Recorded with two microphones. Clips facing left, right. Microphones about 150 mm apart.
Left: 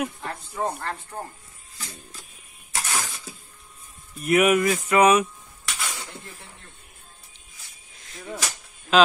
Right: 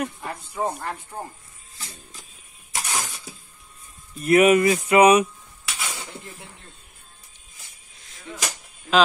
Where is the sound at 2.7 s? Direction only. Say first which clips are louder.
Even; 15° right (ahead or behind).